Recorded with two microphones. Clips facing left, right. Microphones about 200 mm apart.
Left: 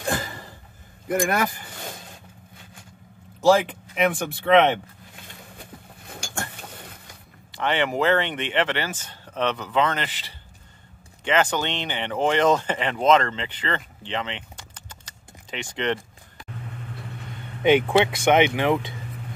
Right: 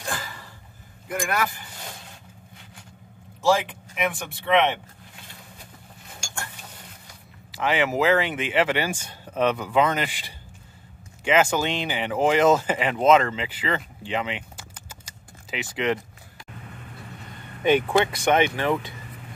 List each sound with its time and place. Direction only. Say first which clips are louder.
1.0 s speech: left 4 dB; 45° left (ahead or behind)
3.4 s speech: left 4 dB; 35° left (ahead or behind)
7.5 s speech: right 1 dB; 5° right (ahead or behind)
17.6 s speech: left 2 dB; 20° left (ahead or behind)